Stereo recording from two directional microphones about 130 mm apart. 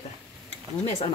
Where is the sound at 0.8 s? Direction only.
50° left (ahead or behind).